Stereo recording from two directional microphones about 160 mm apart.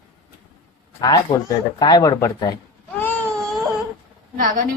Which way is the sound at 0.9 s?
25° left (ahead or behind).